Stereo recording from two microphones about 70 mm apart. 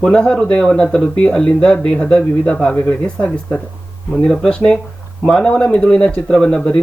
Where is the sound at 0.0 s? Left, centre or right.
Centre.